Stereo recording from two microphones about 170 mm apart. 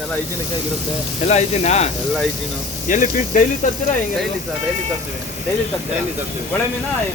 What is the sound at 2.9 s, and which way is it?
Speech, 50° left (ahead or behind).